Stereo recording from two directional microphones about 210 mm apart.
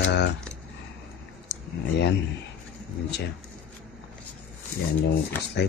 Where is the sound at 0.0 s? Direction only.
55° left (ahead or behind).